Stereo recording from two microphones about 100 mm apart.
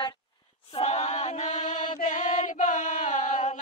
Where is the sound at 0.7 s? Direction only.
90° left.